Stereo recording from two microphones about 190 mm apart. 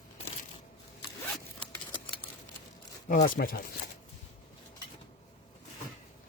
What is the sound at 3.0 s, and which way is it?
Speech, 45° left (ahead or behind).